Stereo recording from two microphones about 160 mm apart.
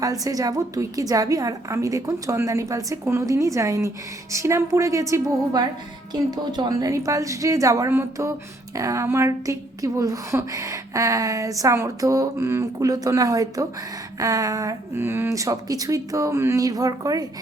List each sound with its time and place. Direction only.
0.0 s a woman's voice: 20° right (ahead or behind)